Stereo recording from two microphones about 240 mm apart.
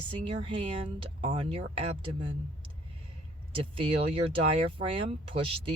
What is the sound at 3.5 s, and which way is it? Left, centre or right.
Speech, right.